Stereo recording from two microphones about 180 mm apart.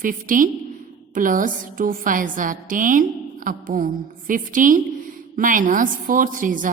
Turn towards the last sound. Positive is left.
turn(degrees=-50)  # may be behind; listen again after turning